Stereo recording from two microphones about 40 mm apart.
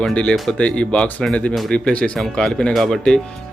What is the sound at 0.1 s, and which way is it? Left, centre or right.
Speech, left.